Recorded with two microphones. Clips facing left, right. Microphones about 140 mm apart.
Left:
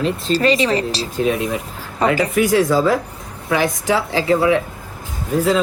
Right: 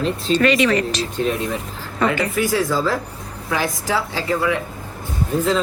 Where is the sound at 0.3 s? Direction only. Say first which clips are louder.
Right 1 dB; 30° left (ahead or behind).